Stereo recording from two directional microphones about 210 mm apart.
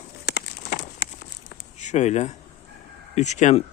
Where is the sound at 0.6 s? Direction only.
50° left (ahead or behind).